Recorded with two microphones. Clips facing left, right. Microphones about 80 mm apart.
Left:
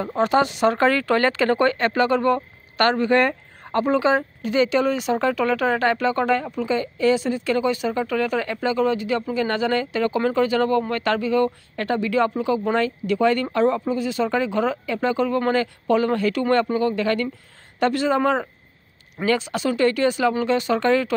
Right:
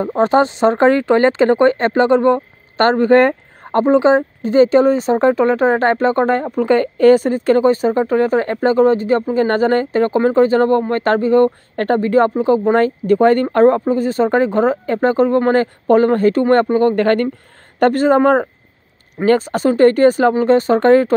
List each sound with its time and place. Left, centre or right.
0.0 s speech: right